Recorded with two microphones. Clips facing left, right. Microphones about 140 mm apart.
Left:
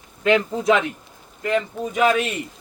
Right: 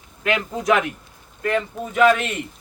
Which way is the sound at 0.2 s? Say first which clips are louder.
Left 5 dB; 30° left (ahead or behind).